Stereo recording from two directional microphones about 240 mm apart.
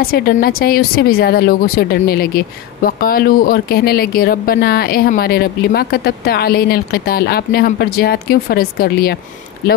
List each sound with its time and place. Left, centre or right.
0.0 s speech: left